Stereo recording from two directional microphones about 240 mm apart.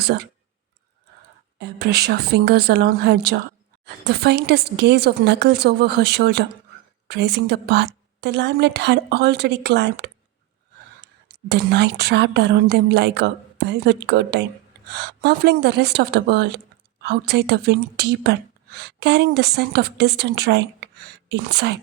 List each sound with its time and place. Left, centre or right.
1.5 s speech: right
11.4 s speech: right